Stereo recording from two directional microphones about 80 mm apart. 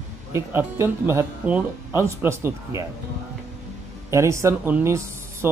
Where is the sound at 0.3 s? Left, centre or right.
Right.